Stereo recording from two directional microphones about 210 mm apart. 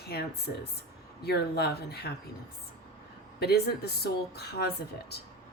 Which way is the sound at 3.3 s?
50° left (ahead or behind).